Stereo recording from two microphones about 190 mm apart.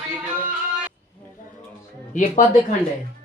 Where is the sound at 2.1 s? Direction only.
45° left (ahead or behind).